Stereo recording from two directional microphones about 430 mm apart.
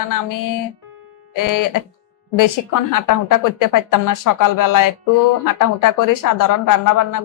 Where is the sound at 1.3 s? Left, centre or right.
Left.